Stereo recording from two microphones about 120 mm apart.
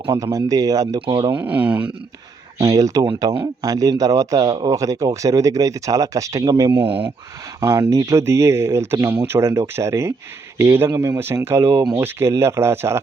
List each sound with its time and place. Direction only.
0.1 s speech: 25° right (ahead or behind)
0.9 s speech: 40° right (ahead or behind)
1.4 s speech: 10° right (ahead or behind)
2.6 s speech: 30° right (ahead or behind); by 7.1 s 45° right (ahead or behind)
7.6 s speech: 30° right (ahead or behind)